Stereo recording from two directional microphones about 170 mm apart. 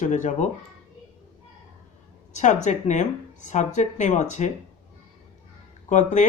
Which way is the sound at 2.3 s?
45° left (ahead or behind).